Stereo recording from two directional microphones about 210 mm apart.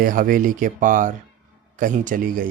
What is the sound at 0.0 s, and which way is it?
Speech, 40° right (ahead or behind).